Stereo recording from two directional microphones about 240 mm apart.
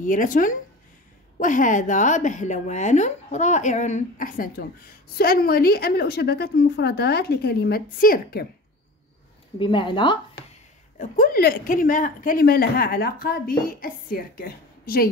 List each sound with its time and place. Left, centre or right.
0.0 s a woman's voice: left
9.6 s speech: centre
11.0 s a woman's voice: left